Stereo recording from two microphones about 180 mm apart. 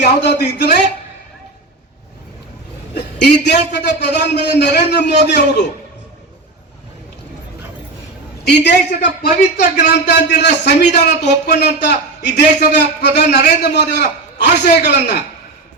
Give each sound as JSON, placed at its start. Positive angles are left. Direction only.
{"t": 0.0, "sound": "a man's voice", "side_deg": 70}
{"t": 2.9, "sound": "a man's voice", "side_deg": 70}
{"t": 8.4, "sound": "a man's voice", "side_deg": 70}
{"t": 9.0, "sound": "a man's voice", "side_deg": 45}
{"t": 9.7, "sound": "a man's voice", "side_deg": 70}